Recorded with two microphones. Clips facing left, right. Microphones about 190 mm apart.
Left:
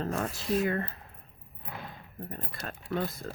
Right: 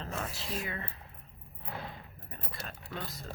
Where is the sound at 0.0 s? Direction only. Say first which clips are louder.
Left 7 dB; 50° left (ahead or behind).